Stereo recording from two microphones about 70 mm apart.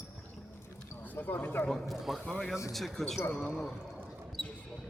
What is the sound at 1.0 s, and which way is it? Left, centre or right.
Speech, left.